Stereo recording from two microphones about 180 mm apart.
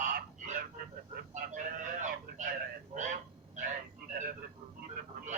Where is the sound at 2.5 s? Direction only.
50° right (ahead or behind).